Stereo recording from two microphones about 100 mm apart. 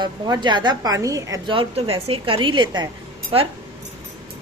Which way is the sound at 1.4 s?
60° right (ahead or behind).